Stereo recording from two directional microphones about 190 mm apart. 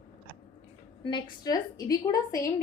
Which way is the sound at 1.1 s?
25° left (ahead or behind).